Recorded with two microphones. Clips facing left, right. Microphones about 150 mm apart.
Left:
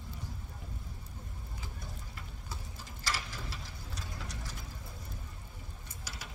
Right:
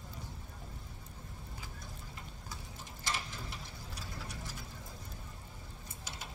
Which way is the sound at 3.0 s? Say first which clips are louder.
Left 1 dB; 20° right (ahead or behind).